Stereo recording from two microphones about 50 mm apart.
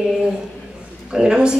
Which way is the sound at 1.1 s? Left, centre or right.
Centre.